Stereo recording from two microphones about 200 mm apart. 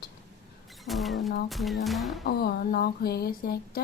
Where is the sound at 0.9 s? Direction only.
Centre (ahead or behind).